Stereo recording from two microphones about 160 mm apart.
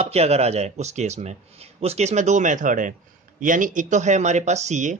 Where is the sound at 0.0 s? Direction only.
40° right (ahead or behind).